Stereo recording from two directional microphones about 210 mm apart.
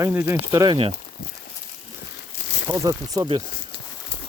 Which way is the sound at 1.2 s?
40° left (ahead or behind).